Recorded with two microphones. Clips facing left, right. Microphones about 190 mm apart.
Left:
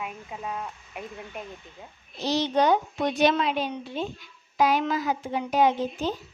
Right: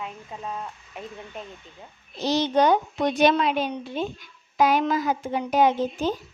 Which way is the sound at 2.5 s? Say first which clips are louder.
Right 2 dB; 45° right (ahead or behind).